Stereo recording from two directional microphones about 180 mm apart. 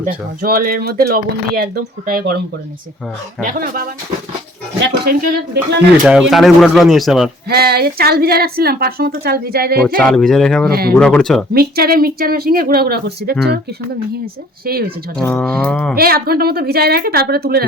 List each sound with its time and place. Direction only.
0.4 s a woman's voice: 55° right (ahead or behind)
3.4 s speech: 50° right (ahead or behind)
4.9 s a woman's voice: 55° right (ahead or behind)
6.1 s speech: 5° right (ahead or behind)
7.4 s a woman's voice: 60° right (ahead or behind)
10.0 s speech: 5° left (ahead or behind)
10.7 s a woman's voice: 60° right (ahead or behind)
10.9 s speech: 5° left (ahead or behind)
11.5 s a woman's voice: 55° right (ahead or behind)
14.7 s a woman's voice: 55° right (ahead or behind)
15.2 s speech: 5° left (ahead or behind)
16.0 s a woman's voice: 60° right (ahead or behind)